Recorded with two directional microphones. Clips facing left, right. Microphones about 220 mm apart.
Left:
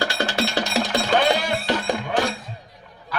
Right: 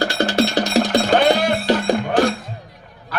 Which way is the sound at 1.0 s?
60° right (ahead or behind).